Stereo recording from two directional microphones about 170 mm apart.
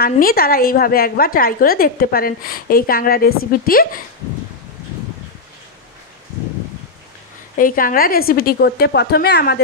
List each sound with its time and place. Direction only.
0.0 s a woman's voice: 60° left (ahead or behind)
7.5 s a woman's voice: 55° left (ahead or behind)